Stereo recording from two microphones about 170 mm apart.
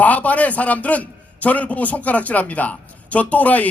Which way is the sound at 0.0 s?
10° left (ahead or behind).